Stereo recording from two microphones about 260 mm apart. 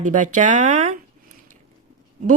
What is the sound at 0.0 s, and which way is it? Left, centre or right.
Speech, right.